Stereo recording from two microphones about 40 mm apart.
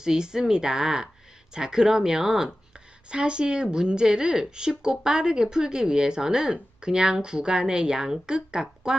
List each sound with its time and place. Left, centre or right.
0.0 s speech: centre
3.1 s speech: right